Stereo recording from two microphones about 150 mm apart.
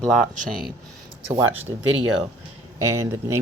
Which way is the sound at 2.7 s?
20° right (ahead or behind).